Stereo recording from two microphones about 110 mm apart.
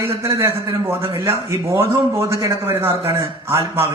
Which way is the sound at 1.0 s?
25° right (ahead or behind).